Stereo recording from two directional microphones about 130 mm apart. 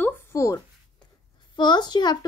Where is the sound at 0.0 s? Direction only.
20° left (ahead or behind).